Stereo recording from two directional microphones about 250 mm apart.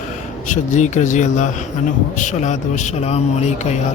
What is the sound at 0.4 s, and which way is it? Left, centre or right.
A man's voice, left.